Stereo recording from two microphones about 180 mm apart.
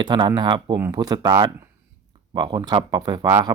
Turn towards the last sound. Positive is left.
turn(degrees=-20)  # may be behind; listen again after turning